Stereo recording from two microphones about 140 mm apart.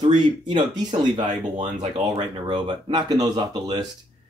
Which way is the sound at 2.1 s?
35° right (ahead or behind).